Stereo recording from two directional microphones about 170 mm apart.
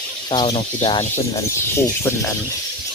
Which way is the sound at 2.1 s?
15° left (ahead or behind).